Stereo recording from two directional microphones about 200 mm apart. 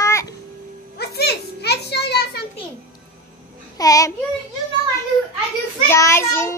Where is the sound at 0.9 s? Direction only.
55° left (ahead or behind).